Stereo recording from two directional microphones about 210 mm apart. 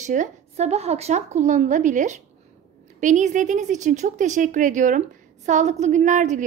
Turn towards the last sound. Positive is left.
turn(degrees=-35)  # may be behind; listen again after turning